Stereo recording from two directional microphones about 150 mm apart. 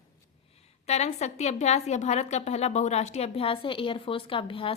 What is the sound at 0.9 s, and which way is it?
A woman's voice, 45° left (ahead or behind).